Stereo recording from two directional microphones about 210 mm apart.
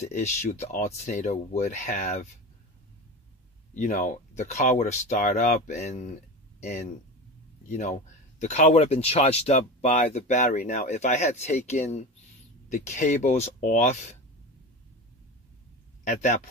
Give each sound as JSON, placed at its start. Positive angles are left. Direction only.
{"t": 0.0, "sound": "speech", "side_deg": 35}
{"t": 3.7, "sound": "speech", "side_deg": 35}
{"t": 16.0, "sound": "speech", "side_deg": 35}